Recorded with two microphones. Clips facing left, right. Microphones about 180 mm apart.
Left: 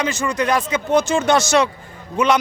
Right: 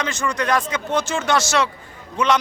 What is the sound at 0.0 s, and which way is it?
A man's voice, 10° left (ahead or behind).